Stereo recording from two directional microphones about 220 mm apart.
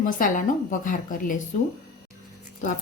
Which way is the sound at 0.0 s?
35° left (ahead or behind).